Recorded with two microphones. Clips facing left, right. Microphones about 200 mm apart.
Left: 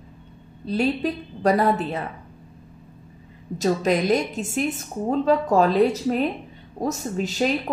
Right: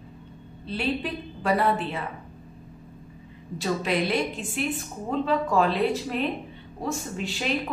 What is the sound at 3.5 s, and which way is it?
A woman's voice, 45° left (ahead or behind).